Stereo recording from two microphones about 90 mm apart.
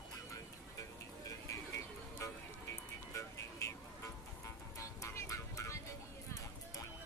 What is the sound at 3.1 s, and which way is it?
Music, 35° left (ahead or behind).